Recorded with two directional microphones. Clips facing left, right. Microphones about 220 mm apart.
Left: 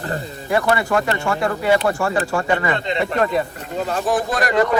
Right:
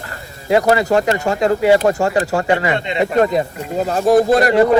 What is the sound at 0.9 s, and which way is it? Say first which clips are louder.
Speech: right 4 dB; 20° right (ahead or behind).